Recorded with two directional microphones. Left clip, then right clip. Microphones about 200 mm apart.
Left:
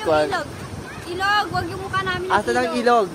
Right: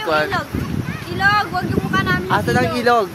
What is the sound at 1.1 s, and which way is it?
Speech, 25° right (ahead or behind).